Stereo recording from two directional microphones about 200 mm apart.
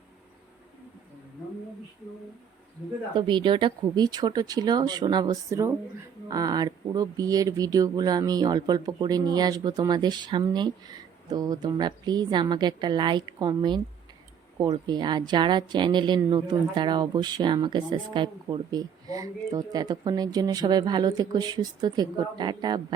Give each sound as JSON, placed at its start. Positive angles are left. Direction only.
{"t": 3.2, "sound": "a woman's voice", "side_deg": -25}